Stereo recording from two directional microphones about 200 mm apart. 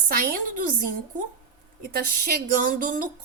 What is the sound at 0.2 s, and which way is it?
Speech, 45° right (ahead or behind).